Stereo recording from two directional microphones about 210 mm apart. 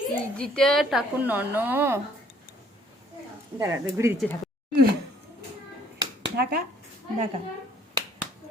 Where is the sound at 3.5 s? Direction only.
15° right (ahead or behind).